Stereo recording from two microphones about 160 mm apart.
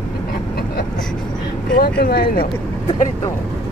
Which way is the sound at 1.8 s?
80° left.